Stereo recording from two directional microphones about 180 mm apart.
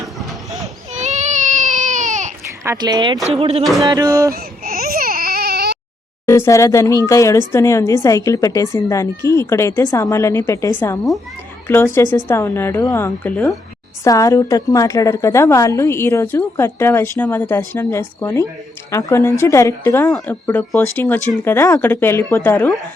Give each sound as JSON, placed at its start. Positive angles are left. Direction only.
{"t": 0.2, "sound": "a sound", "side_deg": 0}
{"t": 0.9, "sound": "baby cry", "side_deg": -40}
{"t": 2.6, "sound": "speech", "side_deg": -20}
{"t": 3.6, "sound": "speech", "side_deg": 0}
{"t": 3.8, "sound": "speech", "side_deg": -20}
{"t": 4.4, "sound": "baby cry", "side_deg": -55}
{"t": 6.2, "sound": "a woman's voice", "side_deg": 15}